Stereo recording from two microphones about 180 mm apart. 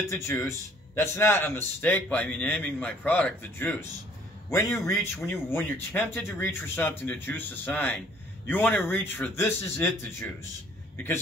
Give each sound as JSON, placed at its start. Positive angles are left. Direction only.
{"t": 0.1, "sound": "speech", "side_deg": 15}
{"t": 4.8, "sound": "speech", "side_deg": 15}